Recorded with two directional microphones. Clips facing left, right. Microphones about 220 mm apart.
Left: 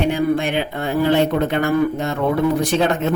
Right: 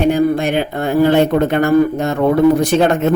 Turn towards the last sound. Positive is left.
turn(degrees=-50)  # may be behind; listen again after turning